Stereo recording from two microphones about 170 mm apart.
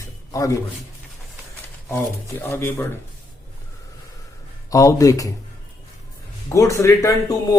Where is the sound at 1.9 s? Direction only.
15° left (ahead or behind).